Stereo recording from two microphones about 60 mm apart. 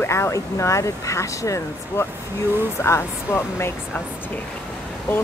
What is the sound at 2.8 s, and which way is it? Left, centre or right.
Speech, left.